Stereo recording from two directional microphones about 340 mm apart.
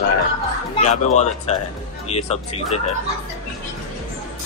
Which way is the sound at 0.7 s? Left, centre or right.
Centre.